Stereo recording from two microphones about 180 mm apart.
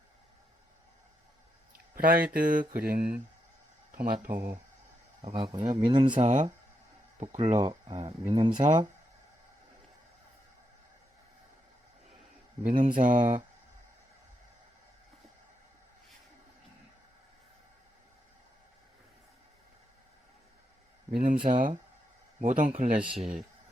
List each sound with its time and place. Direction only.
2.0 s speech: 55° right (ahead or behind)
5.2 s speech: 30° right (ahead or behind)
6.1 s speech: 40° right (ahead or behind)
7.6 s speech: 25° right (ahead or behind)
8.5 s speech: 45° right (ahead or behind)
12.6 s speech: 45° right (ahead or behind)
21.1 s speech: 50° right (ahead or behind)
23.0 s speech: 5° right (ahead or behind)